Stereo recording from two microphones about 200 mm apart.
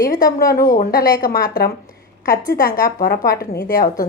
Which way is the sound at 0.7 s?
45° left (ahead or behind).